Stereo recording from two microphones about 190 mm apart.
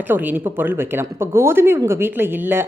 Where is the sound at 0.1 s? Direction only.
10° right (ahead or behind).